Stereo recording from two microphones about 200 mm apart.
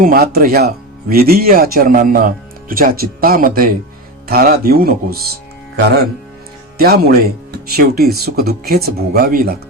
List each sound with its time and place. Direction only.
0.0 s speech: 50° right (ahead or behind)